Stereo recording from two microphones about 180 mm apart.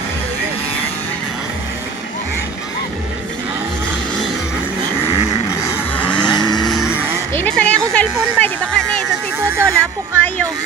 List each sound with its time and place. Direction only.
6.0 s vehicle: 5° left (ahead or behind)
6.3 s vehicle: 25° left (ahead or behind)
6.7 s music: centre (ahead or behind)
7.3 s a sound: 10° left (ahead or behind)
9.4 s a sound: 15° right (ahead or behind)
9.7 s music: 10° left (ahead or behind)